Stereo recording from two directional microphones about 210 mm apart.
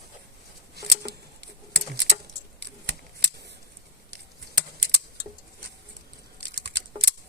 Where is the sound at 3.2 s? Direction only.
50° right (ahead or behind).